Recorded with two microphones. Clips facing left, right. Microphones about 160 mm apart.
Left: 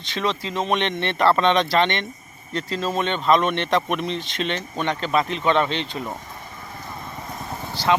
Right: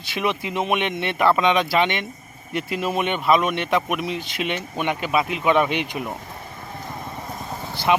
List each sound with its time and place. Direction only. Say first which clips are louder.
0.0 s speech: right 1 dB; 10° right (ahead or behind)
7.7 s vehicle: even; 15° right (ahead or behind)